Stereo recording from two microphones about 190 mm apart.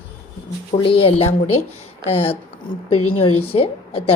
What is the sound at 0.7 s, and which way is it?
A woman's voice, 30° left (ahead or behind).